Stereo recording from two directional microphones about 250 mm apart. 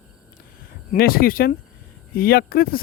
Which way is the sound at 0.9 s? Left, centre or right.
Left.